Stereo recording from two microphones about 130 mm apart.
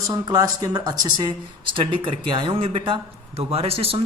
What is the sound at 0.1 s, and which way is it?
A woman's voice, 30° right (ahead or behind).